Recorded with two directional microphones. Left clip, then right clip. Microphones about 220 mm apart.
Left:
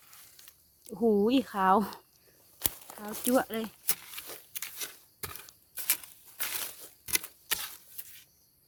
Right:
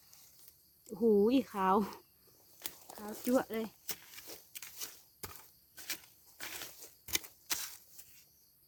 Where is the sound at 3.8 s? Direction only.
45° left (ahead or behind).